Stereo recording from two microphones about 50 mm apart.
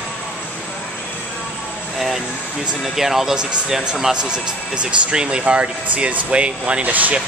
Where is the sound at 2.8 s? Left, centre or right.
Centre.